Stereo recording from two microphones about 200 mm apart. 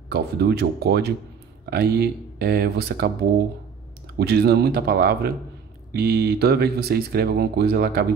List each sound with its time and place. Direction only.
0.1 s speech: 55° right (ahead or behind)